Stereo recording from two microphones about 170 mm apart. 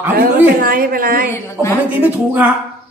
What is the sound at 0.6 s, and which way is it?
Speech, 60° right (ahead or behind).